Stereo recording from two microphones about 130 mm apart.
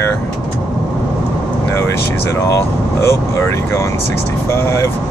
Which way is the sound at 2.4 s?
20° left (ahead or behind).